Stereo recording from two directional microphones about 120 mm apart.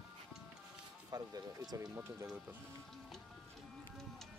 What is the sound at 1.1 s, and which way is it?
Speech, 30° right (ahead or behind).